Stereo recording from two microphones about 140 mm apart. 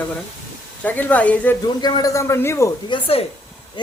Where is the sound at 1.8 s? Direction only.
25° left (ahead or behind).